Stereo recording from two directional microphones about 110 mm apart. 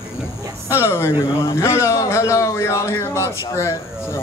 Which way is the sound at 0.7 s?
25° left (ahead or behind).